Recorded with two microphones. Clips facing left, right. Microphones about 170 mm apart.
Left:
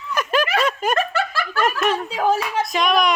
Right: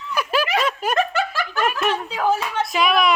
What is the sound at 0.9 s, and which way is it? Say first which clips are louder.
Snicker: right 1 dB; 15° right (ahead or behind).